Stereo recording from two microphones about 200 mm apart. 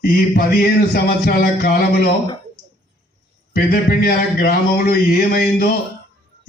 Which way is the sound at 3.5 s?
45° left (ahead or behind).